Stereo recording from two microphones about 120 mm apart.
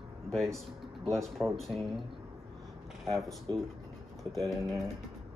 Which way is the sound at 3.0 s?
Centre (ahead or behind).